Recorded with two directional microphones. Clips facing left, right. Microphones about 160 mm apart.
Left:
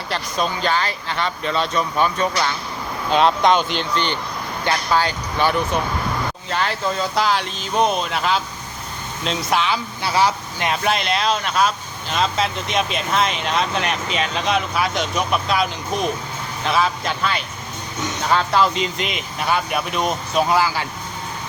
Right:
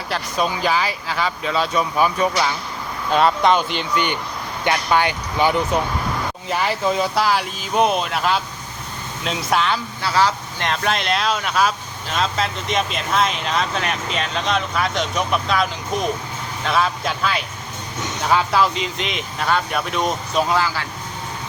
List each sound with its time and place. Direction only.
0.1 s speech: 5° right (ahead or behind)
4.6 s speech: 20° right (ahead or behind); by 9.8 s centre (ahead or behind)
10.0 s speech: 15° left (ahead or behind)
16.6 s speech: centre (ahead or behind)